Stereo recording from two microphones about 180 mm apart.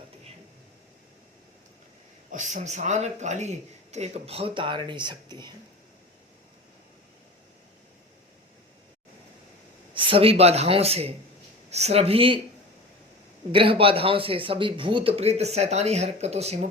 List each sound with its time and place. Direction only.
2.3 s speech: 45° right (ahead or behind); by 5.5 s 25° right (ahead or behind)
9.9 s speech: 30° right (ahead or behind)
13.5 s speech: 30° right (ahead or behind)